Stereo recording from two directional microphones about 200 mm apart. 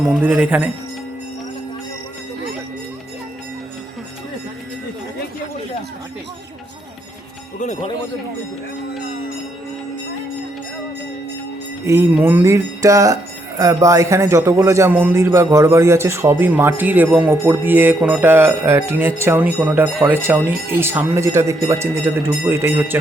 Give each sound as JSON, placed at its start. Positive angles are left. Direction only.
{"t": 0.1, "sound": "a man's voice", "side_deg": -5}
{"t": 7.6, "sound": "speech", "side_deg": 30}
{"t": 11.9, "sound": "a man's voice", "side_deg": -10}